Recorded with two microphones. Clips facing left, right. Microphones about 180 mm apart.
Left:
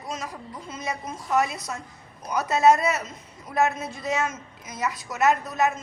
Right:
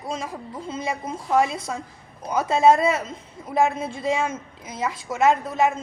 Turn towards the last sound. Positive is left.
turn(degrees=-25)  # may be behind; listen again after turning